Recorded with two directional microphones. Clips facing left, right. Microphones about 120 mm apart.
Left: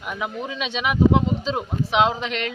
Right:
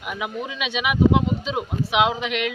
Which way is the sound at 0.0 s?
10° right (ahead or behind).